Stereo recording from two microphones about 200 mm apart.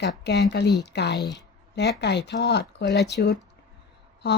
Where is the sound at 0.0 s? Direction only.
60° left (ahead or behind).